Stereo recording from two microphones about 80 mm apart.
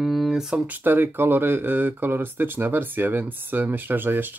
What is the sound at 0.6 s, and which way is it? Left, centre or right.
Speech, right.